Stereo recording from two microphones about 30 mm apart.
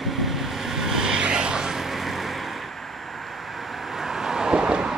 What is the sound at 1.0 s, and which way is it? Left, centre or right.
Vehicle, right.